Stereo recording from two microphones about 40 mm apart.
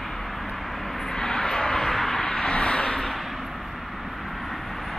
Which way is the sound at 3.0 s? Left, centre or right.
Centre.